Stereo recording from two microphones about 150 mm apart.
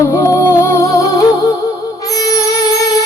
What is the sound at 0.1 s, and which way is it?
Music, 20° left (ahead or behind).